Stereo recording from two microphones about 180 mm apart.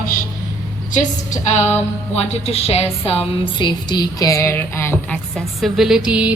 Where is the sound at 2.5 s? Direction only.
35° left (ahead or behind).